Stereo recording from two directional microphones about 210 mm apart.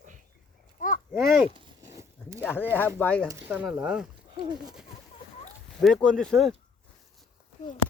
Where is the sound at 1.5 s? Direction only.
20° right (ahead or behind).